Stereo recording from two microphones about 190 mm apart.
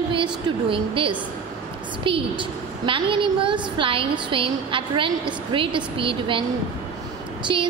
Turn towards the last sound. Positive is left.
turn(degrees=-25)  # may be behind; listen again after turning